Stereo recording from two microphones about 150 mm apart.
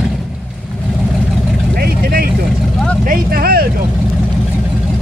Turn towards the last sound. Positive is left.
turn(degrees=-90)